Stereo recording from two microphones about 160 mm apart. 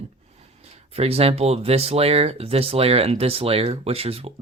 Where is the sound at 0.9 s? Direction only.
40° right (ahead or behind).